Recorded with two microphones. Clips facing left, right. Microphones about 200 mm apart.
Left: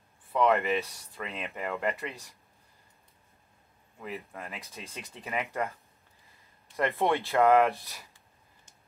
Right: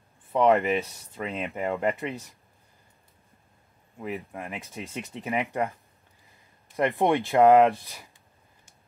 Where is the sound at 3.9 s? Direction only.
15° right (ahead or behind).